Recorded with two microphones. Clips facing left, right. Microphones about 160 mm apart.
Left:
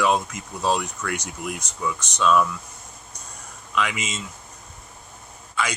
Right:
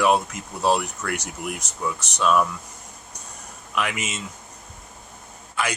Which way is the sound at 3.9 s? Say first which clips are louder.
Even; 65° right (ahead or behind).